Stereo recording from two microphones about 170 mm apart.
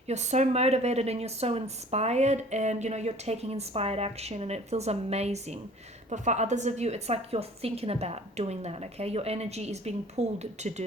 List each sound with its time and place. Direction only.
0.1 s speech: 40° right (ahead or behind)